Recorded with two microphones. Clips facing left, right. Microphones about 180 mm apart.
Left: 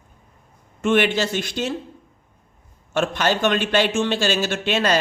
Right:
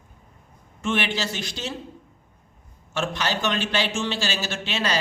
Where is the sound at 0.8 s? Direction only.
55° left (ahead or behind).